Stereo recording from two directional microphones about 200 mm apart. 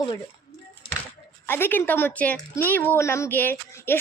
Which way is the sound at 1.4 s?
10° left (ahead or behind).